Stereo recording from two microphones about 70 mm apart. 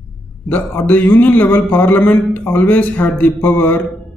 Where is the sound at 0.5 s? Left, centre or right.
Left.